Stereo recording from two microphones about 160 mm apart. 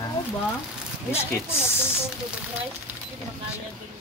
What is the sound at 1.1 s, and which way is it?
Speech, 15° left (ahead or behind).